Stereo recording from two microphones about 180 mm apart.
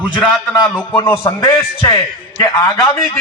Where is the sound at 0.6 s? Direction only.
10° left (ahead or behind).